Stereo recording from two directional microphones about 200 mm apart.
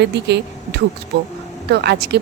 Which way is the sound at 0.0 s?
55° right (ahead or behind).